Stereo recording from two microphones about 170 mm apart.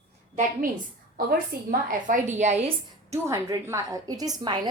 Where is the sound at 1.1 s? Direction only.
60° right (ahead or behind); by 2.6 s 45° right (ahead or behind).